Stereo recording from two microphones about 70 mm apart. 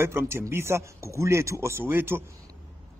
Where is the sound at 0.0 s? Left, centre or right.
Right.